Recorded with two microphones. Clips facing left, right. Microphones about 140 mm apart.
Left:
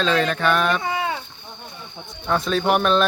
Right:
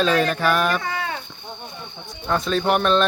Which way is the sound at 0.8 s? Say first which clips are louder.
Left 3 dB; 20° left (ahead or behind).